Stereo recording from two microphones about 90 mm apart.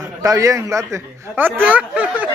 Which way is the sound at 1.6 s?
15° right (ahead or behind).